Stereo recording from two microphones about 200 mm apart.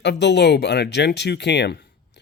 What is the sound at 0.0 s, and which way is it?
Speech, 60° left (ahead or behind).